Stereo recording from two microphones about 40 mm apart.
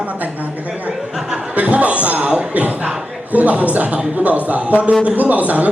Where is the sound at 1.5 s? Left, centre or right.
Right.